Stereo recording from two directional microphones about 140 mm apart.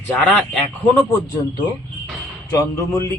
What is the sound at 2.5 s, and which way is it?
Speech, 25° left (ahead or behind).